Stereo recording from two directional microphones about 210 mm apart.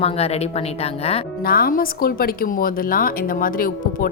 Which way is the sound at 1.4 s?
45° left (ahead or behind).